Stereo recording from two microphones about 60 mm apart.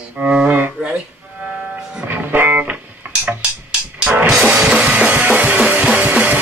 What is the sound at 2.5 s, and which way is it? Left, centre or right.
Music, centre.